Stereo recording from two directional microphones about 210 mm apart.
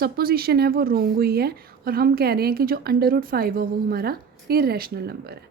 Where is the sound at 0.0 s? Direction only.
45° right (ahead or behind).